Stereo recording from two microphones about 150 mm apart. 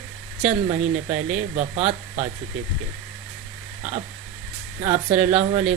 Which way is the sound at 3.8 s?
45° right (ahead or behind).